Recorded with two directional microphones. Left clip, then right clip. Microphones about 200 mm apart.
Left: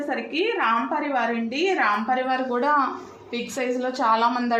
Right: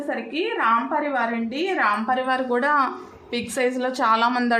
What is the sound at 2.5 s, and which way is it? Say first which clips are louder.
Speech: right 1 dB; 30° right (ahead or behind).